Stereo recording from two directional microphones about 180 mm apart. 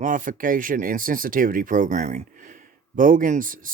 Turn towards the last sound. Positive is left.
turn(degrees=-50)  # may be behind; listen again after turning